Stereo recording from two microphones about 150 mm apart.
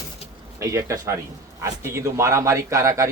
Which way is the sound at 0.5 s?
20° right (ahead or behind).